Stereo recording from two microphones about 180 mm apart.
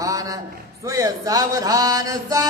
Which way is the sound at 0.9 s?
20° right (ahead or behind).